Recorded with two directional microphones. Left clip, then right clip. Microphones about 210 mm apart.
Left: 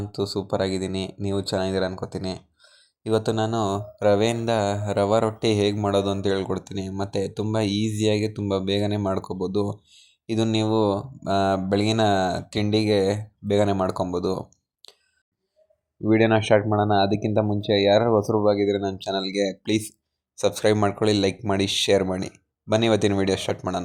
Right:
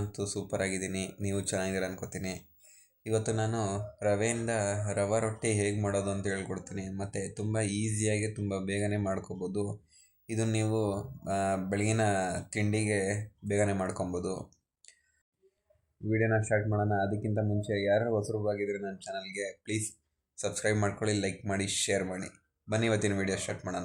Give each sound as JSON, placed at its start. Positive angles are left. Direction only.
{"t": 0.1, "sound": "speech", "side_deg": 25}
{"t": 16.0, "sound": "speech", "side_deg": 35}